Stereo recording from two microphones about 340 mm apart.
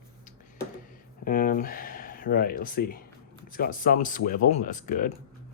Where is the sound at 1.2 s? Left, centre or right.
Left.